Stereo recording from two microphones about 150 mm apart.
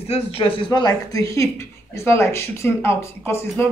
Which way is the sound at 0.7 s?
25° left (ahead or behind).